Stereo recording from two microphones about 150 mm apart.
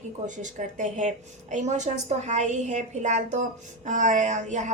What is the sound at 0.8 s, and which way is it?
A woman's voice, 55° right (ahead or behind).